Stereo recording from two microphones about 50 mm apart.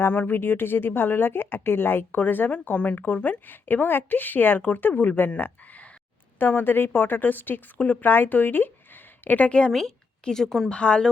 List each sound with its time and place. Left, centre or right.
0.1 s speech: left
5.4 s a sound: left
6.4 s speech: left
9.5 s speech: centre
10.2 s speech: centre
10.7 s speech: left